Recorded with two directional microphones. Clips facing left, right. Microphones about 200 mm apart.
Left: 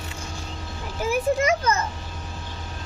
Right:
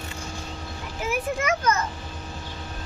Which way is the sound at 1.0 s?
30° left (ahead or behind).